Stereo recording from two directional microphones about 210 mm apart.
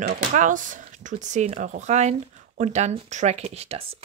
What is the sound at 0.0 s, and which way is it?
Speech, 40° right (ahead or behind).